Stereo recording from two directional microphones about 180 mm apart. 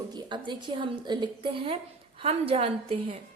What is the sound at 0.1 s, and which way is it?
A woman's voice, 25° right (ahead or behind).